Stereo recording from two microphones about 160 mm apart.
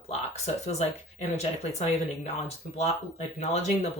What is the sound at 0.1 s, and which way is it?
Speech, 45° left (ahead or behind).